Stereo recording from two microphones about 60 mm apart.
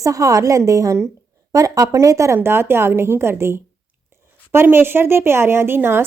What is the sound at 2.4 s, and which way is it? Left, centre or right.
A woman's voice, right.